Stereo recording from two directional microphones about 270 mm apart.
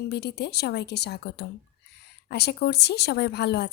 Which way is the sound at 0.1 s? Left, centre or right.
Left.